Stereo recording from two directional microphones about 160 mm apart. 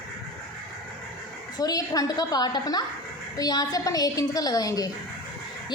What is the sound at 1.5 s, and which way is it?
A woman's voice, 25° left (ahead or behind).